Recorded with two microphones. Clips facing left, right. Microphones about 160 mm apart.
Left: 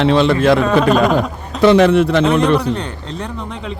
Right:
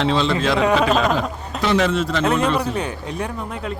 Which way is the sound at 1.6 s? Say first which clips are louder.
Left 9 dB; 60° left (ahead or behind).